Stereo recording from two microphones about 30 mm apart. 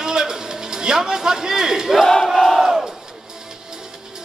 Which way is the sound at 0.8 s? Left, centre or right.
Right.